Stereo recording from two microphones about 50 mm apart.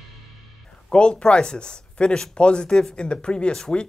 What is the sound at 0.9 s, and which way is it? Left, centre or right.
Speech, centre.